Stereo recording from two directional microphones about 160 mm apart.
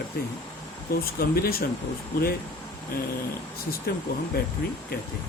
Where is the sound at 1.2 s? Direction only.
70° left (ahead or behind).